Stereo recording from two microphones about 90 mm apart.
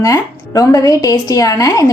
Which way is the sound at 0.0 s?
40° left (ahead or behind).